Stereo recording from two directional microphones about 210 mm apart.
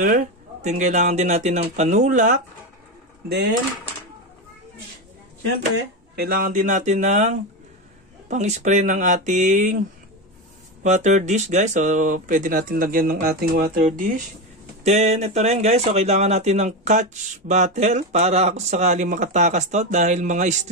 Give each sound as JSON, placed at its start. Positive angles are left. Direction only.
{"t": 0.0, "sound": "speech", "side_deg": -35}
{"t": 6.1, "sound": "speech", "side_deg": -45}
{"t": 10.8, "sound": "speech", "side_deg": -35}